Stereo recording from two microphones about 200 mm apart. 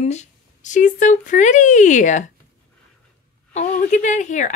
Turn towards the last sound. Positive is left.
turn(degrees=40)  # may be behind; listen again after turning